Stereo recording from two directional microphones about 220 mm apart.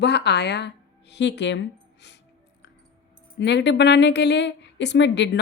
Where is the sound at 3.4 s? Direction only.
50° left (ahead or behind).